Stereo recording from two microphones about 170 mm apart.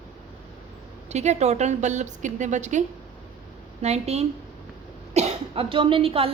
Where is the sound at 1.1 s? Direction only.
40° right (ahead or behind).